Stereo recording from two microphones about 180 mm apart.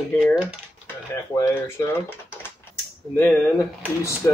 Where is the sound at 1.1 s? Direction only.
15° left (ahead or behind).